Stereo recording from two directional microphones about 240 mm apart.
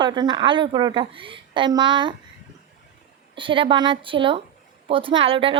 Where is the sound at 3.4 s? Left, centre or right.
Right.